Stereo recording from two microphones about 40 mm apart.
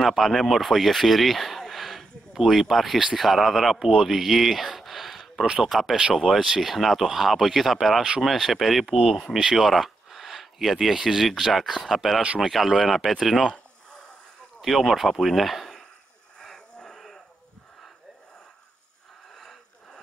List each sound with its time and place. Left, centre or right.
0.0 s a man's voice: centre
1.6 s a sound: centre
3.2 s a man's voice: centre
4.0 s a sound: centre
5.4 s speech: centre
5.7 s a man's voice: centre
9.4 s speech: centre
9.7 s a man's voice: centre
14.7 s a man's voice: centre
16.3 s music: centre
16.8 s dog: centre